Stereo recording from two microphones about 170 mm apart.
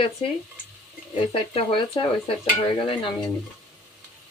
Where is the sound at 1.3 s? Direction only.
35° left (ahead or behind).